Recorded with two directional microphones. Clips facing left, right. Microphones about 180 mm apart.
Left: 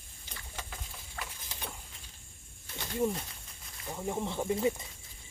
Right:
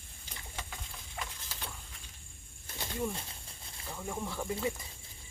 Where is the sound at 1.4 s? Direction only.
20° left (ahead or behind).